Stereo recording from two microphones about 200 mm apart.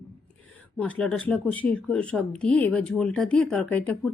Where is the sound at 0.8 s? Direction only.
5° left (ahead or behind).